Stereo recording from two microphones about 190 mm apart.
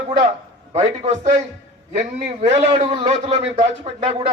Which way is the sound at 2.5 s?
35° right (ahead or behind).